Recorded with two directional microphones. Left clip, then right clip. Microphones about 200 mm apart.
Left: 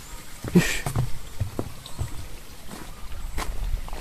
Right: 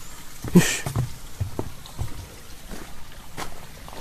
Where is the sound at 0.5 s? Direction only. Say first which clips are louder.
Right 2 dB; 25° right (ahead or behind).